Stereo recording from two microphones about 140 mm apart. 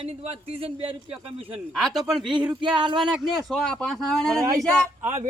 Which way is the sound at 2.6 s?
35° right (ahead or behind).